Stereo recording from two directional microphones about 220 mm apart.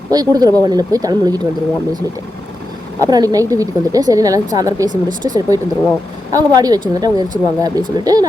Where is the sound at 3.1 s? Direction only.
15° right (ahead or behind).